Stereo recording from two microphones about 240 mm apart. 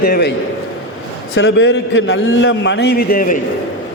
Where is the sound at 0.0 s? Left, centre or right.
Left.